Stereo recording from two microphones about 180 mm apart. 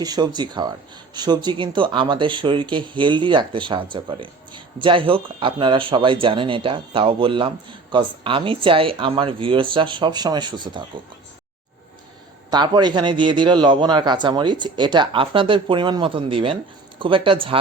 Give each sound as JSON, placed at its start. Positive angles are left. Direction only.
{"t": 0.0, "sound": "speech", "side_deg": -20}
{"t": 12.5, "sound": "speech", "side_deg": -25}